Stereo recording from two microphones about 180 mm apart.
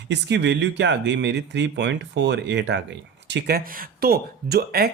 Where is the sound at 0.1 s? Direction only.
75° right (ahead or behind).